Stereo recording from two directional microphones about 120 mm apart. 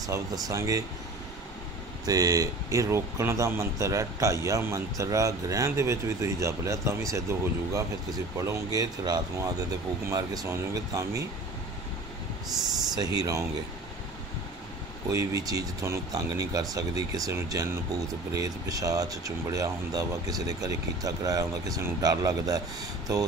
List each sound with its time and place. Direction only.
0.0 s speech: 30° right (ahead or behind)
2.0 s speech: 30° right (ahead or behind)
13.2 s speech: 25° right (ahead or behind)
15.1 s speech: 30° right (ahead or behind)